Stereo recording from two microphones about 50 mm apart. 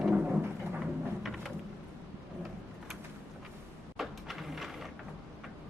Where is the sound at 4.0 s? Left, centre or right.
Centre.